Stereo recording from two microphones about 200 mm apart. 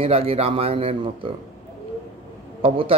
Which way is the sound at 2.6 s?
30° right (ahead or behind).